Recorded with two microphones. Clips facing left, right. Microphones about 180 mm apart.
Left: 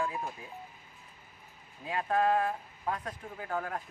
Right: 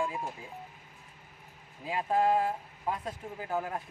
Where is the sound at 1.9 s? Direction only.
10° right (ahead or behind).